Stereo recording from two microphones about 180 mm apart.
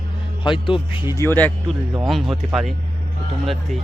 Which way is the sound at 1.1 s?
10° left (ahead or behind).